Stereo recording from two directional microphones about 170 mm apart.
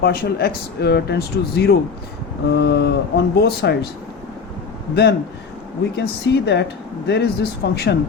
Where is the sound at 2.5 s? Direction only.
80° left.